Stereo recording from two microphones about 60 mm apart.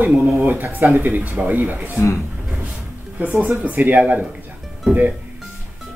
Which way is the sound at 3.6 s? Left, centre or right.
Right.